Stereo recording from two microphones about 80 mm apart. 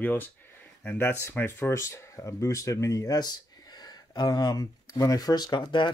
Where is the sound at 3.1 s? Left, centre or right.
Left.